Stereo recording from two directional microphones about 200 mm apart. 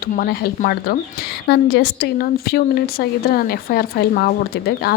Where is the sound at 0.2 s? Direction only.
50° left (ahead or behind).